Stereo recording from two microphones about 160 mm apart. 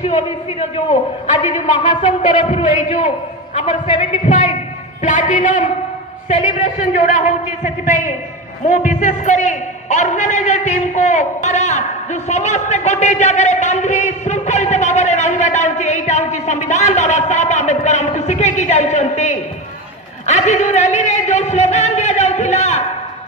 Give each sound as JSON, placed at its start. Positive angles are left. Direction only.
{"t": 1.2, "sound": "a man's voice", "side_deg": 50}